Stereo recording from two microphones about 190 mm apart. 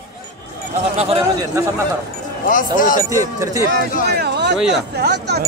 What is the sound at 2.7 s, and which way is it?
Speech, 45° left (ahead or behind).